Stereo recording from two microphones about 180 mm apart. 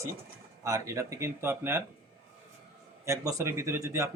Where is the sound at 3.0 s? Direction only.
15° right (ahead or behind).